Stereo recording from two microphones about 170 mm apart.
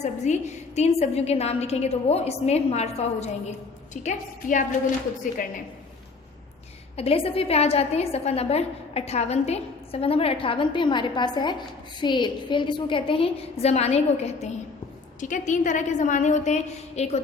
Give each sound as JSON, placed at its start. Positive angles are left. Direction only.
{"t": 0.0, "sound": "a woman's voice", "side_deg": 40}
{"t": 6.9, "sound": "a woman's voice", "side_deg": 35}